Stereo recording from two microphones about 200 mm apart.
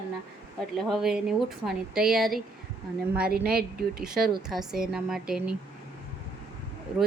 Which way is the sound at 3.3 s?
50° right (ahead or behind).